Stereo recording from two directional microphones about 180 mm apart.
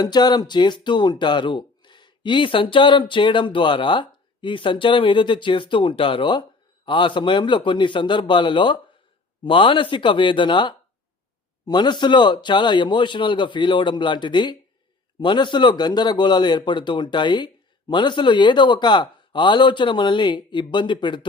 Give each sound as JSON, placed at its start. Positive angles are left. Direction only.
{"t": 0.0, "sound": "speech", "side_deg": 20}